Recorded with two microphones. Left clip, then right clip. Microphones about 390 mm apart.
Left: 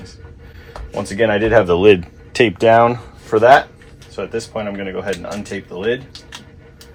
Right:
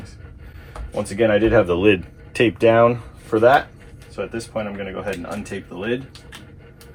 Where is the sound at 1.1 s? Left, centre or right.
Left.